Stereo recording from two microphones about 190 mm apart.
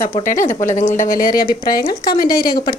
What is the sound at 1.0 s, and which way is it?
A woman's voice, 50° left (ahead or behind).